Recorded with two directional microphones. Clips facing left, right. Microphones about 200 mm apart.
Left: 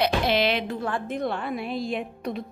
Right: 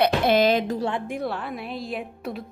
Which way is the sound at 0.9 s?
20° right (ahead or behind).